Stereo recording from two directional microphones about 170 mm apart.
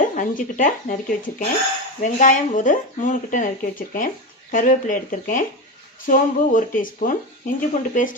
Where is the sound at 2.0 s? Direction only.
50° left (ahead or behind).